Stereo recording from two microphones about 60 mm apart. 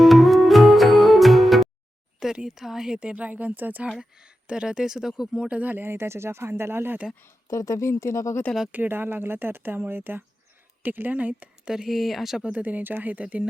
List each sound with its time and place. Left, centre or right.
0.0 s music: centre
2.2 s a sound: centre
2.6 s speech: centre; by 3.8 s right
4.4 s speech: centre; by 7.0 s right
7.5 s speech: left
8.7 s speech: right
11.7 s speech: centre
12.4 s speech: right